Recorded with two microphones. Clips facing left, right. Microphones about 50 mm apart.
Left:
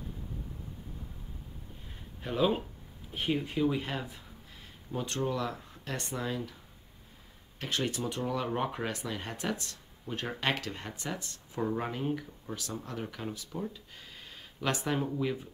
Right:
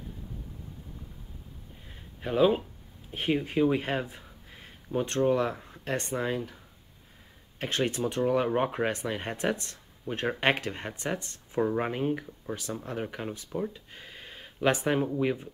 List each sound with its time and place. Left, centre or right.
2.2 s speech: centre
3.1 s speech: right